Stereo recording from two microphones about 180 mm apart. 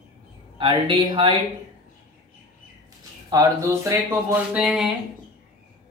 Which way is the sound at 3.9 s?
15° right (ahead or behind).